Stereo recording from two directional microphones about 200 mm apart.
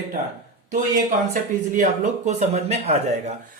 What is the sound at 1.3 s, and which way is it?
Speech, 40° right (ahead or behind).